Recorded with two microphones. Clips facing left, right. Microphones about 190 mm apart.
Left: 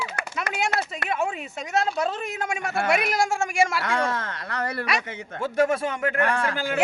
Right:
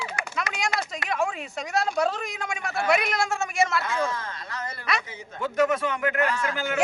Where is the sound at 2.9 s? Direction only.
10° left (ahead or behind).